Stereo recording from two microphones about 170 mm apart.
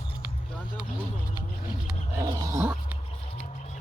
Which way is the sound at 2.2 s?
20° right (ahead or behind).